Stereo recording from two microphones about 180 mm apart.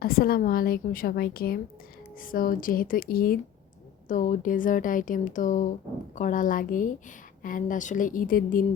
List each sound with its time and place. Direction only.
0.0 s a woman's voice: 55° left (ahead or behind)